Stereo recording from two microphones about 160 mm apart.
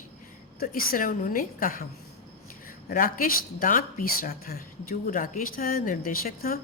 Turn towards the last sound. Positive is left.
turn(degrees=65)  # may be behind; listen again after turning